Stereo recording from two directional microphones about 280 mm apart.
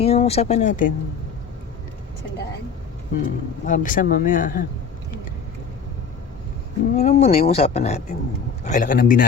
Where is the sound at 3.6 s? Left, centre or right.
Left.